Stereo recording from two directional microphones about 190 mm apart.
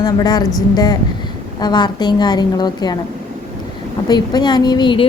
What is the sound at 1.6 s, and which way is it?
A woman's voice, 20° left (ahead or behind).